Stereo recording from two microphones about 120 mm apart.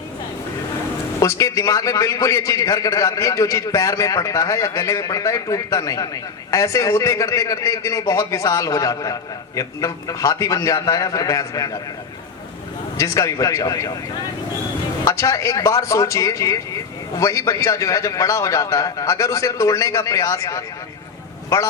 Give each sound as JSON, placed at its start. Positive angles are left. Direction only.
{"t": 1.2, "sound": "speech", "side_deg": 25}
{"t": 13.0, "sound": "speech", "side_deg": 25}
{"t": 15.0, "sound": "speech", "side_deg": 25}